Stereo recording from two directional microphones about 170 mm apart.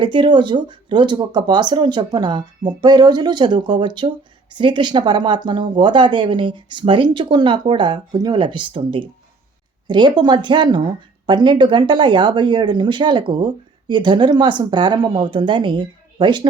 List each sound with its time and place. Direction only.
0.0 s speech: 30° right (ahead or behind)